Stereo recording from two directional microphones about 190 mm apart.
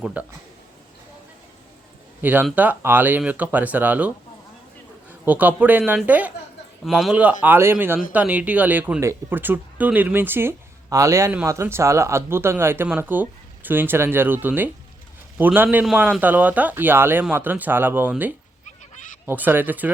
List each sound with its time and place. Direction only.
0.0 s speech: 10° right (ahead or behind)
2.2 s speech: 10° right (ahead or behind)
5.2 s speech: 10° right (ahead or behind)
18.6 s a sound: 40° left (ahead or behind)
19.2 s speech: 10° right (ahead or behind)